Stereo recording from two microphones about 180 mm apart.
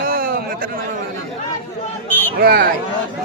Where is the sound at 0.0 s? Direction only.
55° right (ahead or behind).